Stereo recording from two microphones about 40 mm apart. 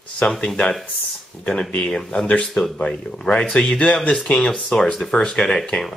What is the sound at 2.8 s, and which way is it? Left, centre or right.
Speech, left.